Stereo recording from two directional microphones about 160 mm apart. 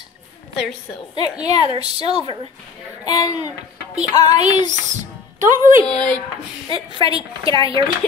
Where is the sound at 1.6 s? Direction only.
40° right (ahead or behind).